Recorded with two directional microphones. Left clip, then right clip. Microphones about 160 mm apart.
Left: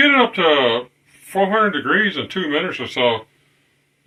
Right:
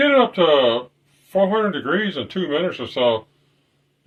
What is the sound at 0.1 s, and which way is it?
Speech, 80° right.